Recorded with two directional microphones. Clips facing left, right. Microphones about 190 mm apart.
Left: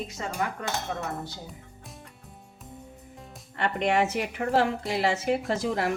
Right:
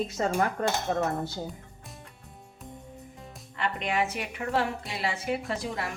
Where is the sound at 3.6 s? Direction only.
35° left (ahead or behind).